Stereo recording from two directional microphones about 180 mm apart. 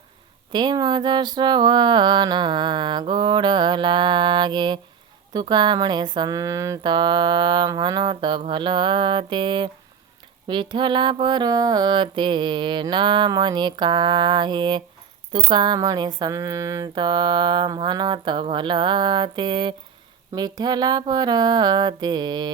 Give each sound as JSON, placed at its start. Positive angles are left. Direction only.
{"t": 0.5, "sound": "mantra", "side_deg": -25}